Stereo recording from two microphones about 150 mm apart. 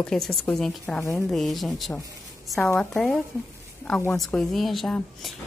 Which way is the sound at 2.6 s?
10° left (ahead or behind).